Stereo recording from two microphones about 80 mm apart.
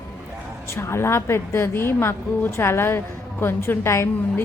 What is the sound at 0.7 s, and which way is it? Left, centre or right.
A woman's voice, left.